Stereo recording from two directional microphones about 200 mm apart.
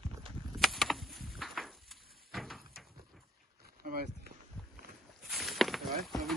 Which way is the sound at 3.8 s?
50° right (ahead or behind).